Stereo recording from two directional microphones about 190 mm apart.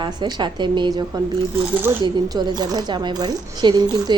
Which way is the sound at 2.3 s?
20° right (ahead or behind).